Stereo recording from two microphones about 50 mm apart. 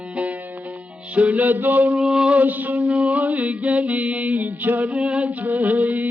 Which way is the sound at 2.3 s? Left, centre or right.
Right.